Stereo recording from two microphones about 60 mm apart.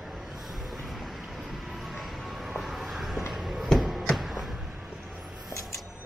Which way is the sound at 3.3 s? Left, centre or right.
Centre.